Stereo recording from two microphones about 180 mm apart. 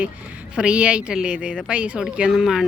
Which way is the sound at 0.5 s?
5° right (ahead or behind).